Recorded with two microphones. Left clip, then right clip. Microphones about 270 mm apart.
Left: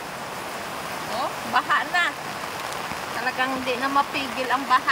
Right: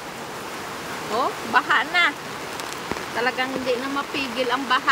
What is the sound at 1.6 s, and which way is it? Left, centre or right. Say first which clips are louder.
Speech: right 3 dB; centre.